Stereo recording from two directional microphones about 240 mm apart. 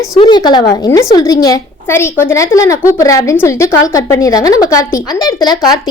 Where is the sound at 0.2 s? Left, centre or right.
Centre.